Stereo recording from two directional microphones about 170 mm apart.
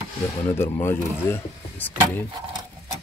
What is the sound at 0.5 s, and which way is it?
Speech, 15° left (ahead or behind).